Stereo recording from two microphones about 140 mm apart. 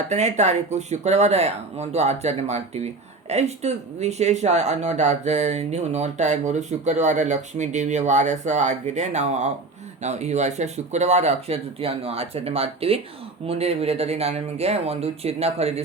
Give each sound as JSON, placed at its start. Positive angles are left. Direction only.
{"t": 0.1, "sound": "speech", "side_deg": -55}